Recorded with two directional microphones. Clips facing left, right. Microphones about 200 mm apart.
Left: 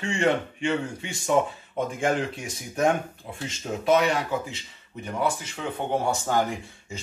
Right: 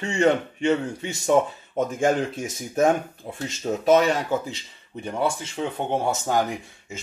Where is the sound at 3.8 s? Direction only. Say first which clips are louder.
Right 3 dB; 40° right (ahead or behind).